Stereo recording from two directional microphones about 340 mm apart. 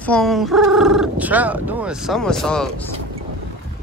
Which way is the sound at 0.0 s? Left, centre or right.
Centre.